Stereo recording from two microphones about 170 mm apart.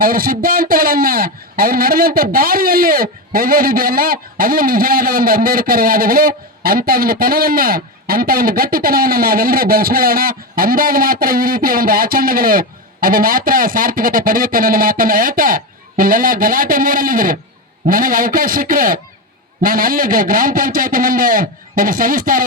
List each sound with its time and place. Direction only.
0.0 s speech: 55° right (ahead or behind)